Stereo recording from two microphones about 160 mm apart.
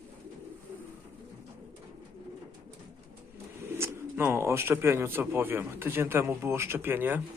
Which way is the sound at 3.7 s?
15° right (ahead or behind).